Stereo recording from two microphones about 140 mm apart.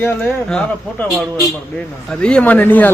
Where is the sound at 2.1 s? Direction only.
5° left (ahead or behind).